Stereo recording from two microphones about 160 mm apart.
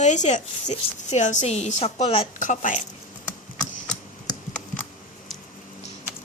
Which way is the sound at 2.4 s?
50° left (ahead or behind).